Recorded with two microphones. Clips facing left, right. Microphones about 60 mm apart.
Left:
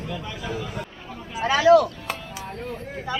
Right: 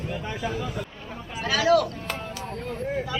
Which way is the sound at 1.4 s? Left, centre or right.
Left.